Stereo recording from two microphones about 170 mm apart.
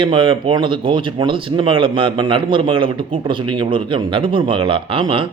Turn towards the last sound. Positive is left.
turn(degrees=-30)  # may be behind; listen again after turning